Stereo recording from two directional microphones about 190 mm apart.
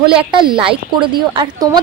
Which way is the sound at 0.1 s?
25° right (ahead or behind).